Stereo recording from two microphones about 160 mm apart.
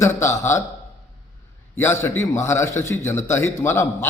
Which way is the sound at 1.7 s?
15° left (ahead or behind).